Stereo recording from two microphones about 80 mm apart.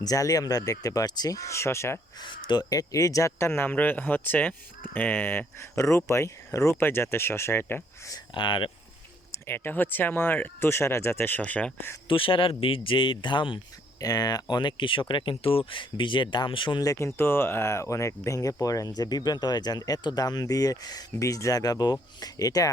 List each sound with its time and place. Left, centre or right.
0.0 s speech: left
2.2 s speech: left
2.6 s speech: left
5.5 s speech: left
6.7 s speech: left
8.3 s speech: left
9.5 s speech: left
12.0 s speech: left
14.0 s speech: left
14.5 s speech: left
16.8 s speech: left